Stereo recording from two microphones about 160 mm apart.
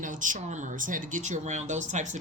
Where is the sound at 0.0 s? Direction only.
55° right (ahead or behind).